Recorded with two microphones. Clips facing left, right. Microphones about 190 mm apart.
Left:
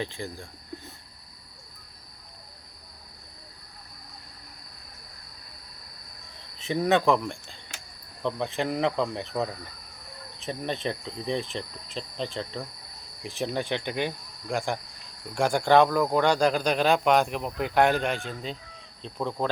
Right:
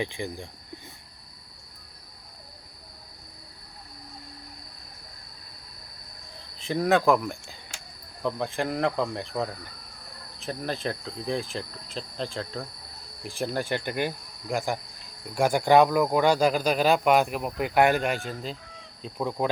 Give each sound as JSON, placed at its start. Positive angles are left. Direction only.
{"t": 0.0, "sound": "speech", "side_deg": -15}
{"t": 6.6, "sound": "speech", "side_deg": 0}